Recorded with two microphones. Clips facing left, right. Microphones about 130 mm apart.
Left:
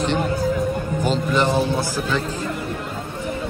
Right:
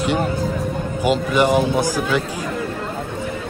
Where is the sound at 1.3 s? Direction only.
15° right (ahead or behind).